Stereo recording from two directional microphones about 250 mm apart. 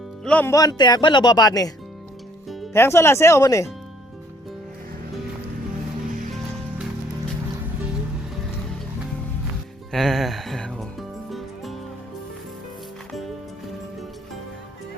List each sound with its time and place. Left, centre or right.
0.3 s speech: centre
2.7 s speech: centre
9.9 s music: centre